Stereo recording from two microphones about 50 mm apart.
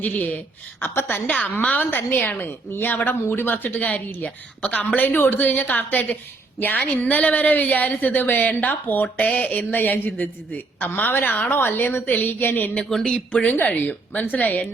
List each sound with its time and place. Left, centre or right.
0.0 s speech: left
9.3 s a sound: left
9.7 s speech: left
12.9 s speech: centre
13.1 s a sound: left
13.5 s speech: left